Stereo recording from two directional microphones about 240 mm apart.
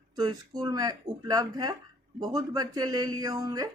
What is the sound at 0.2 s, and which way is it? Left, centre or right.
Speech, centre.